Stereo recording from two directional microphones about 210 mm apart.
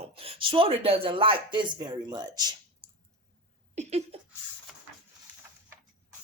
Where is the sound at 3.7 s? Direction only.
30° right (ahead or behind).